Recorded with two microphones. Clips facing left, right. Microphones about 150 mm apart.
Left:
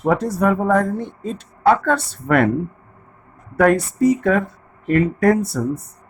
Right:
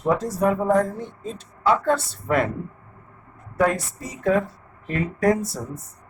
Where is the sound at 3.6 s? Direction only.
65° left (ahead or behind).